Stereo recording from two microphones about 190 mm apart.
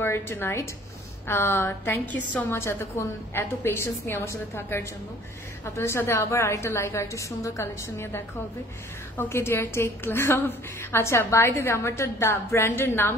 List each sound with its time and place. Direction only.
0.0 s a woman's voice: 10° left (ahead or behind)